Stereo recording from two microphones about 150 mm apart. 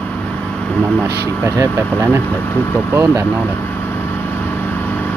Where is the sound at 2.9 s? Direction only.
20° right (ahead or behind).